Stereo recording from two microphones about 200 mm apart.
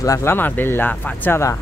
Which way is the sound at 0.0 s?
15° left (ahead or behind).